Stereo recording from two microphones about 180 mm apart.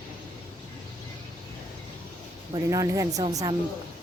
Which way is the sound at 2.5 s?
20° right (ahead or behind).